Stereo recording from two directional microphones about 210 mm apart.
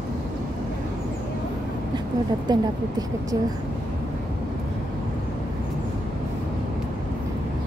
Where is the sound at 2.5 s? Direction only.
20° right (ahead or behind).